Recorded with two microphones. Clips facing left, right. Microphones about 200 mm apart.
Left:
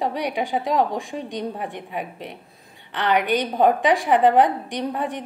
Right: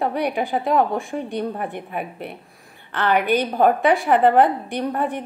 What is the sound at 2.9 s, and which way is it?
A woman's voice, 15° left (ahead or behind).